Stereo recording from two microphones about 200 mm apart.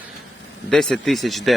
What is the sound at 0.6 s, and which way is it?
Speech, centre (ahead or behind).